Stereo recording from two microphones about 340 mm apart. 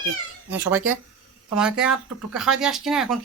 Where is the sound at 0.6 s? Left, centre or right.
Centre.